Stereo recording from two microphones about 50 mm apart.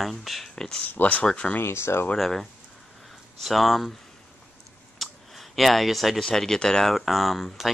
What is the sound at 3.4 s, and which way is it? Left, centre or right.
Speech, centre.